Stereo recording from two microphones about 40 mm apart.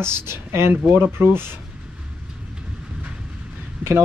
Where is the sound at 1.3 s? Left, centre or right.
Right.